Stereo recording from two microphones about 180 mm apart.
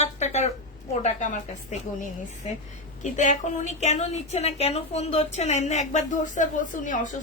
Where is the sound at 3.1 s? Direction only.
45° left (ahead or behind).